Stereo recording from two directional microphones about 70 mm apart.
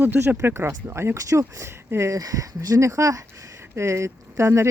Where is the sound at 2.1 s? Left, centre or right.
Right.